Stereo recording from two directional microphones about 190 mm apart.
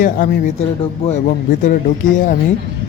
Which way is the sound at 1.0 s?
30° left (ahead or behind).